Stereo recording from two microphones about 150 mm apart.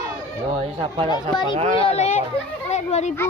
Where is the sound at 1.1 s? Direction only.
30° left (ahead or behind).